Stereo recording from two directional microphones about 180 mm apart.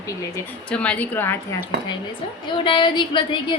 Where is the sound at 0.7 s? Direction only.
5° left (ahead or behind).